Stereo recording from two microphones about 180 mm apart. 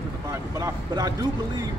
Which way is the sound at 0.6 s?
20° right (ahead or behind).